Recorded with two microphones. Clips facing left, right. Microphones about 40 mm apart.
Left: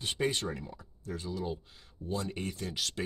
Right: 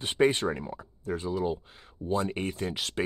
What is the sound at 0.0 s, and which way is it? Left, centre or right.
Speech, right.